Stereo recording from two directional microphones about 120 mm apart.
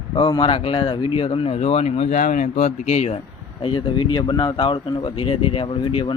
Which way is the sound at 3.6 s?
45° left (ahead or behind).